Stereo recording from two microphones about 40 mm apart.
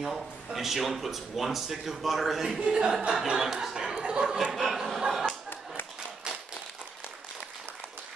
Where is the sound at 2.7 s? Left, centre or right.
Centre.